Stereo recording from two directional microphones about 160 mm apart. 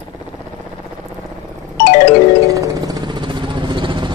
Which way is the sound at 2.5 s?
20° right (ahead or behind).